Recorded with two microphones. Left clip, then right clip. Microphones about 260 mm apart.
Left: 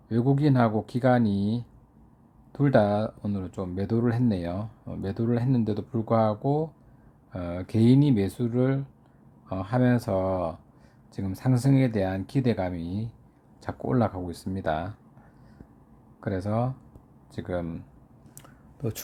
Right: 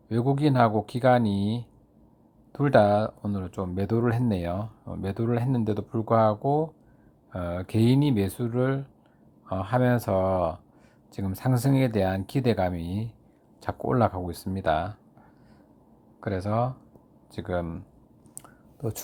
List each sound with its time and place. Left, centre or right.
0.1 s speech: centre
16.2 s speech: centre
18.4 s a sound: centre